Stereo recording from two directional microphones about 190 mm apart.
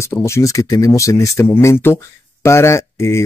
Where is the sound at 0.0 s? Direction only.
15° left (ahead or behind).